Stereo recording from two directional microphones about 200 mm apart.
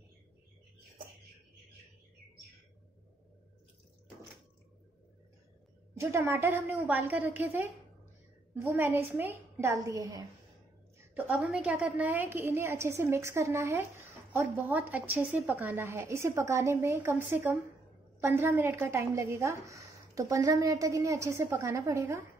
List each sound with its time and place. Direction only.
5.9 s a woman's voice: 10° right (ahead or behind)